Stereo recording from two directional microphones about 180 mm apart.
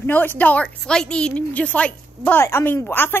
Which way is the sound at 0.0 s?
10° left (ahead or behind).